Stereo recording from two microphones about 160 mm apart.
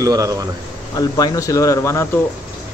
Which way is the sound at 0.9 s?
25° left (ahead or behind).